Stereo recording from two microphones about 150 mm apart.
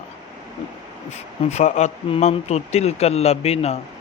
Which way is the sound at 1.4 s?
45° left (ahead or behind).